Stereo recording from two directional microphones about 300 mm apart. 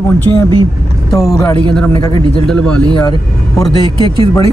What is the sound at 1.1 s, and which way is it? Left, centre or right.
Speech, centre.